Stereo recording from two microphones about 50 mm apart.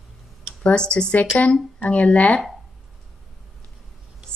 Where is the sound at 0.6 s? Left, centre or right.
Left.